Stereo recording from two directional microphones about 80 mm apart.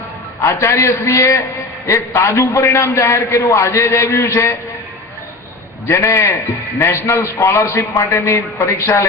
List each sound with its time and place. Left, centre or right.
0.4 s a man's voice: left
5.9 s a man's voice: left